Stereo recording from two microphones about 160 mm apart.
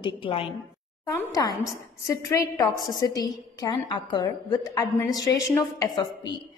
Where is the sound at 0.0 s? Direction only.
35° left (ahead or behind).